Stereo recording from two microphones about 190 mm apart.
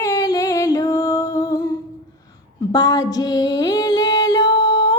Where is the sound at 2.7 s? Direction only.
20° left (ahead or behind).